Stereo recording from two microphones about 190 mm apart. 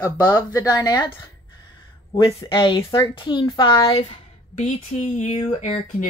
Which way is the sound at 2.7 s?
15° left (ahead or behind).